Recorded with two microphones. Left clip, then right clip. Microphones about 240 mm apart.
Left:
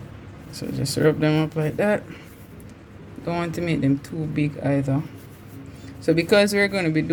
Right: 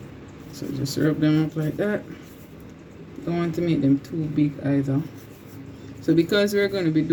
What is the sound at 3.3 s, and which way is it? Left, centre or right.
Speech, left.